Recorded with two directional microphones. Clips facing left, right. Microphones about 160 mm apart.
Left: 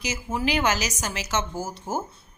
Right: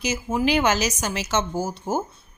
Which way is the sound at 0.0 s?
20° right (ahead or behind).